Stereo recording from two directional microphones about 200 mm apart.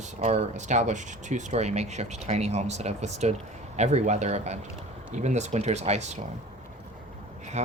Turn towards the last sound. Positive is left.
turn(degrees=-35)  # may be behind; listen again after turning